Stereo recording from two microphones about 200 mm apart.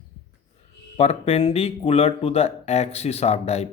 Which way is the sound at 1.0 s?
30° left (ahead or behind).